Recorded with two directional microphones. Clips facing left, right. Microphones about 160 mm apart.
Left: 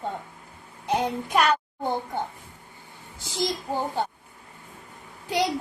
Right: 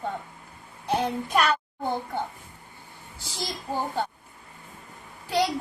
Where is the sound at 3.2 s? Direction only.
20° left (ahead or behind).